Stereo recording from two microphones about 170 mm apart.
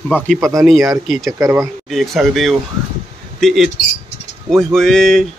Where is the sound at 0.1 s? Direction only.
5° left (ahead or behind).